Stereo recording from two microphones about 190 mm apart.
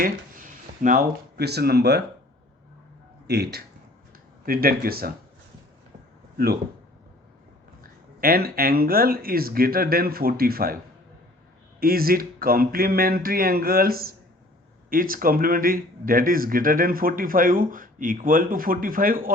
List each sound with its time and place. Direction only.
0.0 s speech: 45° right (ahead or behind)
3.2 s speech: 60° right (ahead or behind)
6.3 s speech: 55° right (ahead or behind)
8.2 s speech: 50° right (ahead or behind)
11.8 s speech: 50° right (ahead or behind)